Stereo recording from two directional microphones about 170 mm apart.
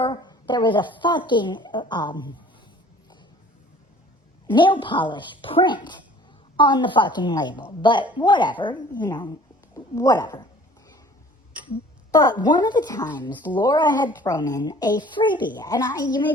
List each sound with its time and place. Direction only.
0.0 s a woman's voice: 25° left (ahead or behind)
4.4 s a woman's voice: 30° left (ahead or behind)
12.1 s a woman's voice: 20° left (ahead or behind)
13.3 s speech: 10° left (ahead or behind)
13.6 s a woman's voice: 25° left (ahead or behind)